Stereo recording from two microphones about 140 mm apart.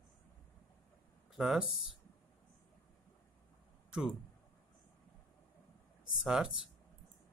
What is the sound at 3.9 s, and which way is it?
Speech, 5° right (ahead or behind).